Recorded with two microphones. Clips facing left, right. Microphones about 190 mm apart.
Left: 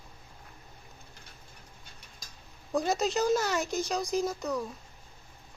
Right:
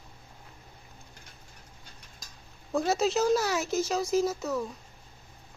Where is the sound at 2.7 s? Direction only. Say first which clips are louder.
Right 2 dB; centre (ahead or behind).